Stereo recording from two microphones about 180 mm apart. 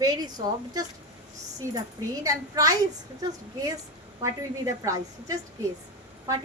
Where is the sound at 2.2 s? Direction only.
20° right (ahead or behind).